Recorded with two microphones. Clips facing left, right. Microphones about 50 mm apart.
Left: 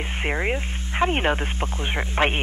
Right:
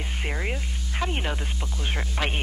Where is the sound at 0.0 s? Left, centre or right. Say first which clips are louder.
Left 6 dB; left.